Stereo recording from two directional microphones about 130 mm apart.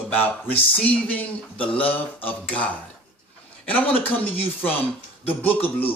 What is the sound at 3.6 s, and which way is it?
Speech, 10° left (ahead or behind).